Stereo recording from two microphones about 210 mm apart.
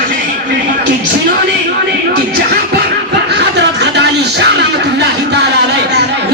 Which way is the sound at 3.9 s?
55° right (ahead or behind).